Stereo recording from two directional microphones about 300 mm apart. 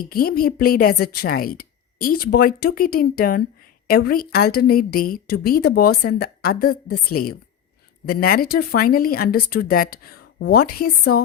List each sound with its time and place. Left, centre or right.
0.1 s a woman's voice: left